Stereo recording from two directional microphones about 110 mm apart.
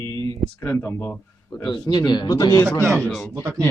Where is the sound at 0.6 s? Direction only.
20° left (ahead or behind).